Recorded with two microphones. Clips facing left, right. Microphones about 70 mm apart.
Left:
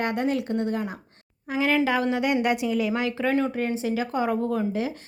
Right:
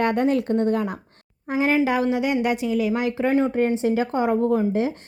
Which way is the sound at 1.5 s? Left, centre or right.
Right.